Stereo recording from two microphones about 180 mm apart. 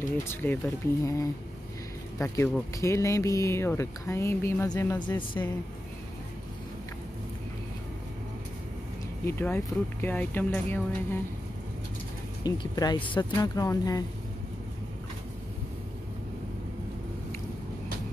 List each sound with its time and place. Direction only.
0.2 s speech: 10° left (ahead or behind)
9.2 s speech: 10° left (ahead or behind)
12.4 s speech: 20° left (ahead or behind)